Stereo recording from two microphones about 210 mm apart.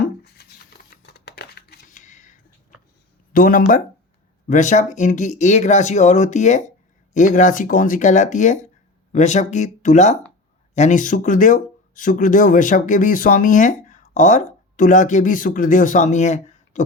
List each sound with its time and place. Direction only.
1.0 s scissors: 50° left (ahead or behind)
3.3 s speech: 40° left (ahead or behind)